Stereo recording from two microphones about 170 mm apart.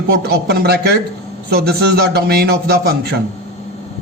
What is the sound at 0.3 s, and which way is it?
A man's voice, 70° right (ahead or behind).